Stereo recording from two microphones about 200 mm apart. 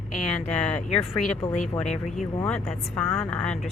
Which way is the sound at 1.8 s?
35° left (ahead or behind).